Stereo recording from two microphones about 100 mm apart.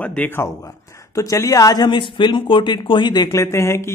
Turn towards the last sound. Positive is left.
turn(degrees=30)  # may be behind; listen again after turning